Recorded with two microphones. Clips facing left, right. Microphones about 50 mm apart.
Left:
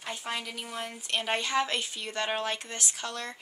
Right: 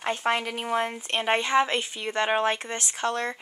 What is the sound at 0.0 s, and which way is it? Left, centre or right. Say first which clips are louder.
Speech: right 10 dB; right.